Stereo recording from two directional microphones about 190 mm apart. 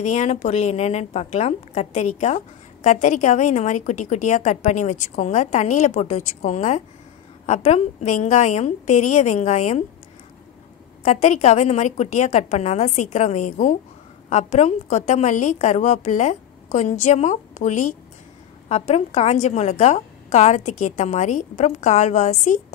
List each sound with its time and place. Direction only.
0.0 s a woman's voice: 35° left (ahead or behind)
11.0 s a woman's voice: 35° left (ahead or behind)